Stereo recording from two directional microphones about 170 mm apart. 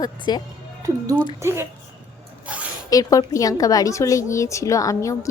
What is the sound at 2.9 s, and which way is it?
A woman's voice, 20° left (ahead or behind).